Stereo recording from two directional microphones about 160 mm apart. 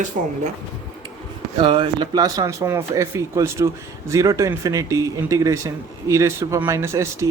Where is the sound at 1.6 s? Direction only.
30° right (ahead or behind).